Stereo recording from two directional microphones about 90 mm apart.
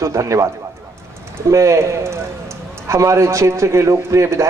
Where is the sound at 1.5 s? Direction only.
35° right (ahead or behind).